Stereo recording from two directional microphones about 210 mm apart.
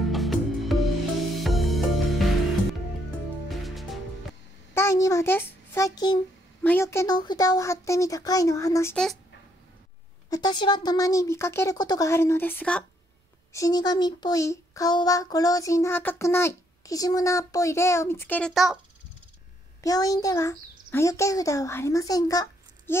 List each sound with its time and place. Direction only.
0.1 s music: centre (ahead or behind)
3.4 s music: centre (ahead or behind)
4.7 s a child's voice: 15° left (ahead or behind)
8.9 s speech: centre (ahead or behind)
10.3 s a child's voice: 20° left (ahead or behind); by 18.8 s centre (ahead or behind)
19.8 s a child's voice: 15° left (ahead or behind)